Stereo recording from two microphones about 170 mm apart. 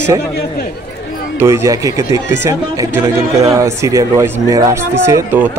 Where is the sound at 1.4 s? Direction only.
15° right (ahead or behind).